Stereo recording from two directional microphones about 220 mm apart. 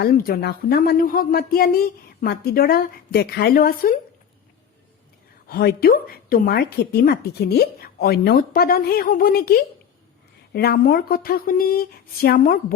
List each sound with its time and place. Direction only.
0.0 s a woman's voice: 45° left (ahead or behind)
5.5 s a woman's voice: 45° left (ahead or behind)